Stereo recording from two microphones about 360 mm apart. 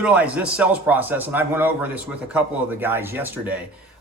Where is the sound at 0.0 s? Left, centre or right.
Centre.